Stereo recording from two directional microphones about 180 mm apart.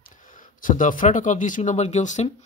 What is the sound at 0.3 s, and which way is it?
Speech, 45° left (ahead or behind).